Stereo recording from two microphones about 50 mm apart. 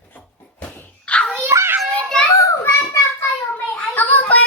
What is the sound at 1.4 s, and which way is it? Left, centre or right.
Children playing, right.